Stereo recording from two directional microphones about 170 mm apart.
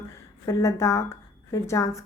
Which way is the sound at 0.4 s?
20° left (ahead or behind).